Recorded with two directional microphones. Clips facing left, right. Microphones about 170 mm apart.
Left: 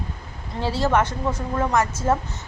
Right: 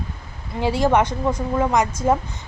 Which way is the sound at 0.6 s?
15° right (ahead or behind).